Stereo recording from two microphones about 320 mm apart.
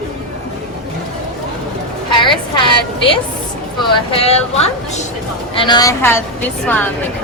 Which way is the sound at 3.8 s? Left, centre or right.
Centre.